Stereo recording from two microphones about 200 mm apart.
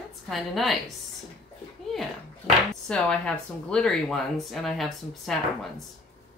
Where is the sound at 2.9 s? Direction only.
5° left (ahead or behind).